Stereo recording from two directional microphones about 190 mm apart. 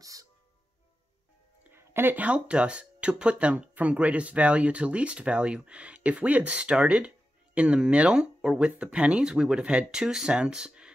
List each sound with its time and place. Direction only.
0.0 s music: 15° right (ahead or behind)
1.6 s speech: 10° right (ahead or behind)